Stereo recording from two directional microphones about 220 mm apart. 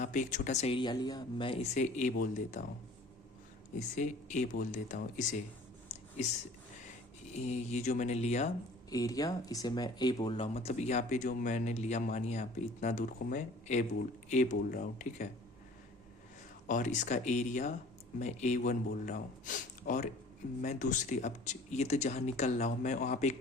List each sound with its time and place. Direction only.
0.0 s speech: 35° left (ahead or behind)
3.8 s speech: 35° left (ahead or behind)
5.9 s a sound: 30° left (ahead or behind)
7.3 s speech: 30° left (ahead or behind)
8.9 s speech: 15° left (ahead or behind); by 15.3 s 40° left (ahead or behind)
16.6 s speech: 35° left (ahead or behind)